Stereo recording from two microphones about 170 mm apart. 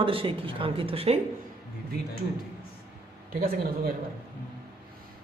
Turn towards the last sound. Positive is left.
turn(degrees=-60)  # may be behind; listen again after turning